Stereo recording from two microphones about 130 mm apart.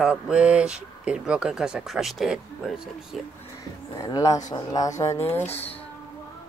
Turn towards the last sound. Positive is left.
turn(degrees=15)  # may be behind; listen again after turning